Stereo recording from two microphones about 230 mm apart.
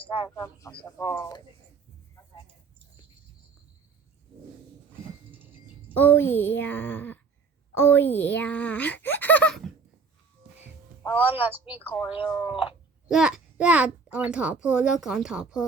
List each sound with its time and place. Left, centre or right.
0.0 s speech: left
0.3 s speech: centre
5.3 s a sound: centre
5.9 s a woman's voice: centre
11.2 s speech: centre
11.8 s speech: centre
12.1 s speech: left
12.4 s a child's voice: centre